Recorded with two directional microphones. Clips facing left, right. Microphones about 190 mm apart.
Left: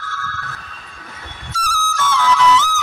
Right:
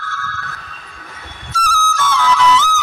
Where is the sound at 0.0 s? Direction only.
65° right (ahead or behind).